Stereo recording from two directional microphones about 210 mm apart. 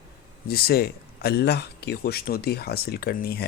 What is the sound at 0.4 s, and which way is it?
Speech, 45° left (ahead or behind).